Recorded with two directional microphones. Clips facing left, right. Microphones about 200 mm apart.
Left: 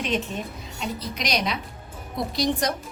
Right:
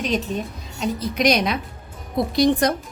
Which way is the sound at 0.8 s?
50° right (ahead or behind).